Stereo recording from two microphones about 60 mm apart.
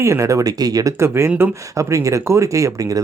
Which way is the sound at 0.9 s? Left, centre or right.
Right.